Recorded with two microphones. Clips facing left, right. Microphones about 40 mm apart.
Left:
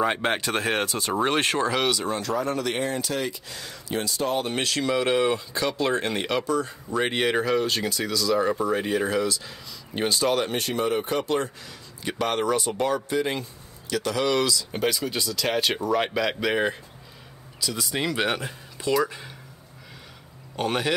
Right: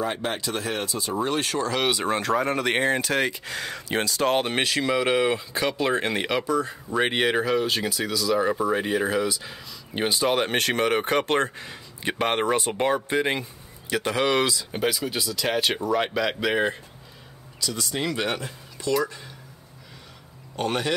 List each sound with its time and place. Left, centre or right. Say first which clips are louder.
0.0 s speech: left 3 dB; left
1.2 s speech: left 3 dB; left
2.0 s speech: right 3 dB; right
4.0 s speech: right 4 dB; right
4.6 s speech: right 1 dB; centre
10.5 s speech: right 3 dB; right
11.6 s speech: right 3 dB; right
14.7 s speech: even; centre
20.5 s speech: even; centre